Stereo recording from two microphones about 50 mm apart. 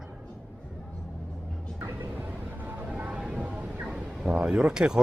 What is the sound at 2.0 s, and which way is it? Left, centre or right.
Music, right.